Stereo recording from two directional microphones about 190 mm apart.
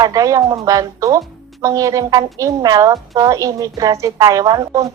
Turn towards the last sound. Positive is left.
turn(degrees=-15)  # may be behind; listen again after turning